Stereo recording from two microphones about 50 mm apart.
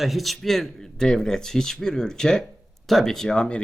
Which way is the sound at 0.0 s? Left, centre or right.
Centre.